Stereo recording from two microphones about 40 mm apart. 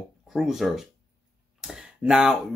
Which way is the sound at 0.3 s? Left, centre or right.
Centre.